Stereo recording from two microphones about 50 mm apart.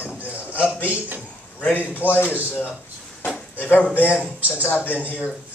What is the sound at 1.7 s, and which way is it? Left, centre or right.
Speech, left.